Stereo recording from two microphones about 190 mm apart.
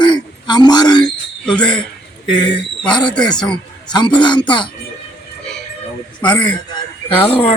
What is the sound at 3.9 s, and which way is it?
Speech, 20° left (ahead or behind).